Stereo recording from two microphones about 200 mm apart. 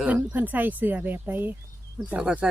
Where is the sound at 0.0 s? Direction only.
5° right (ahead or behind).